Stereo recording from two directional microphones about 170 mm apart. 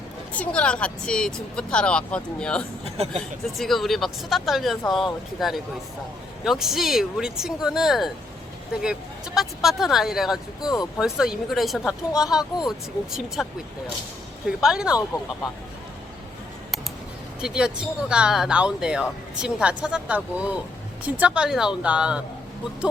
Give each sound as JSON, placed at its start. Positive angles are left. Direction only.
{"t": 0.3, "sound": "speech", "side_deg": 5}
{"t": 2.8, "sound": "speech", "side_deg": -35}
{"t": 3.6, "sound": "speech", "side_deg": 0}
{"t": 10.6, "sound": "speech", "side_deg": 25}
{"t": 11.0, "sound": "speech", "side_deg": -5}
{"t": 17.4, "sound": "speech", "side_deg": -5}